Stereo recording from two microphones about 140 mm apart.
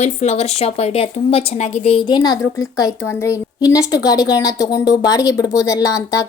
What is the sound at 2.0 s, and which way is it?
A woman's voice, 30° left (ahead or behind).